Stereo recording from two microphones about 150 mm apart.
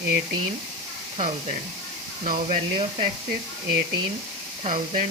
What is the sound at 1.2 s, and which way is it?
Speech, 55° right (ahead or behind).